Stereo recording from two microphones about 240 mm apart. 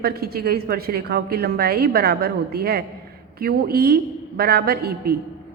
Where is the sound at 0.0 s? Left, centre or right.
Right.